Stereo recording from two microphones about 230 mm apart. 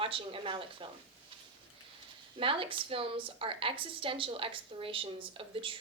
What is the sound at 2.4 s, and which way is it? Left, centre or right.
A woman's voice, right.